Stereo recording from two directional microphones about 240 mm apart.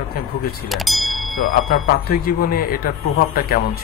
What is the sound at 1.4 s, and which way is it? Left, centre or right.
Speech, left.